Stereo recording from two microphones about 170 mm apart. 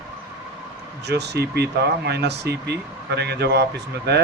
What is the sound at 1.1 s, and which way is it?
Speech, 80° right.